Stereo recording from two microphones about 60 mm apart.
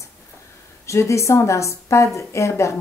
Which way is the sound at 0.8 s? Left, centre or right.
Left.